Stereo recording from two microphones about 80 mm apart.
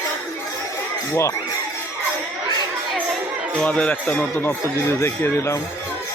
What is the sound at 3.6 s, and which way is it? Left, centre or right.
Speech, centre.